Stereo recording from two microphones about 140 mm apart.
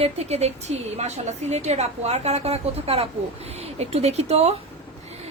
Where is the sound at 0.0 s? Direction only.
50° right (ahead or behind).